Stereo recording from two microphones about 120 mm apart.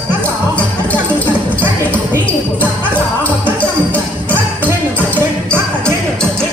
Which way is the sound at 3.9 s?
15° left (ahead or behind).